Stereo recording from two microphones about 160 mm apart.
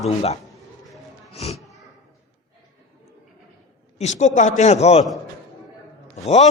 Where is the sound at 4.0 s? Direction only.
45° left (ahead or behind).